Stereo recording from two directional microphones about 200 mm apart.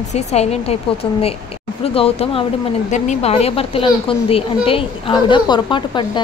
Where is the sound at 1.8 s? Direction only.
30° left (ahead or behind).